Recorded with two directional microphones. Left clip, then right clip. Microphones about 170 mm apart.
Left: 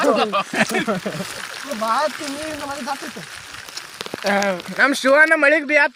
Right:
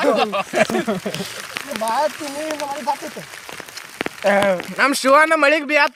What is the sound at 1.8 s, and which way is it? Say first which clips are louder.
Speech: even; 40° right (ahead or behind).